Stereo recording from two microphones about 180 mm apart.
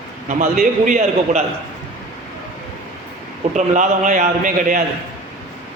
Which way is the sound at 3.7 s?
45° right (ahead or behind).